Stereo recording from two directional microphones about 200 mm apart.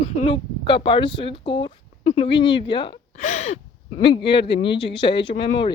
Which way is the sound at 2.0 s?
40° left (ahead or behind).